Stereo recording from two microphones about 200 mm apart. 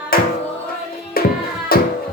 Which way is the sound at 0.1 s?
50° left (ahead or behind).